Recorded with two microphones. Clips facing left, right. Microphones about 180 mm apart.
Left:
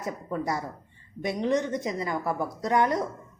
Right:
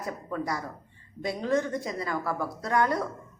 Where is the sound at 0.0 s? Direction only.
25° left (ahead or behind).